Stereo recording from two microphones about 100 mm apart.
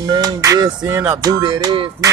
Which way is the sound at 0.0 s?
40° right (ahead or behind).